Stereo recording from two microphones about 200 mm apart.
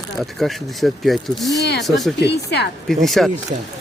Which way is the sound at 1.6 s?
55° left (ahead or behind).